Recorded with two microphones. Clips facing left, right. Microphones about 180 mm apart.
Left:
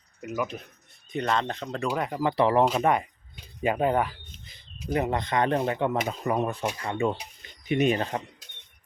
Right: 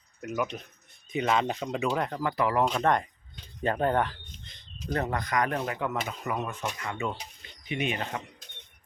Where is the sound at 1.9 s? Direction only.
10° left (ahead or behind).